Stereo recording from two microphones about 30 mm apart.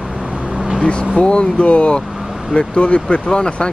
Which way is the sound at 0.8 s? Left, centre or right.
Left.